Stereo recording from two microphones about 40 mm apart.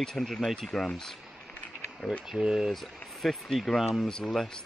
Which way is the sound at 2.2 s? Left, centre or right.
Centre.